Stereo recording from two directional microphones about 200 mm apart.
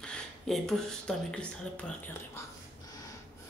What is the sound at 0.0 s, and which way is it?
Speech, 5° left (ahead or behind).